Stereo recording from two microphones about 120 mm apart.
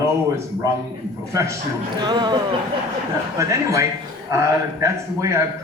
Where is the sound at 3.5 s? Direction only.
25° right (ahead or behind).